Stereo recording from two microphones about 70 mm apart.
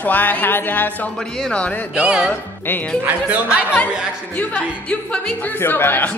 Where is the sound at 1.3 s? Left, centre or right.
Centre.